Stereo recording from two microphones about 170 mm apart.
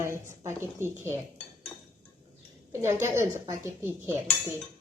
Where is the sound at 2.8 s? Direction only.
15° right (ahead or behind).